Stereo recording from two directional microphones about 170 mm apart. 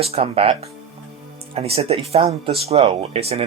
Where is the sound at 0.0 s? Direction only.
35° right (ahead or behind).